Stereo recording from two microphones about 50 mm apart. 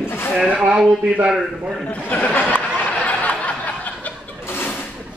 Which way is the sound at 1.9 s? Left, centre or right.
Left.